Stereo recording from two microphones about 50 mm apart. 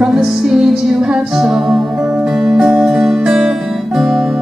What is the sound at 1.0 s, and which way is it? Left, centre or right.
A capella, centre.